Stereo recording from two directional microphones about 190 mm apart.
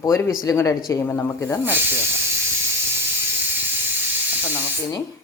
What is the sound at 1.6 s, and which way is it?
Speech, 10° right (ahead or behind).